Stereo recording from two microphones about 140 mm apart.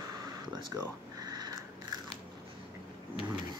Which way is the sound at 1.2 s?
30° right (ahead or behind).